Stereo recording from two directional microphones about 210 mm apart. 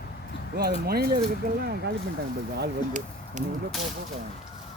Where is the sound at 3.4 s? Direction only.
35° right (ahead or behind).